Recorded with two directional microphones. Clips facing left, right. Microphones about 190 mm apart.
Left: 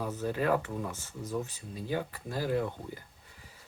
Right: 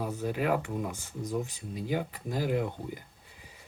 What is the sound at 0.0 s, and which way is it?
Speech, 10° right (ahead or behind).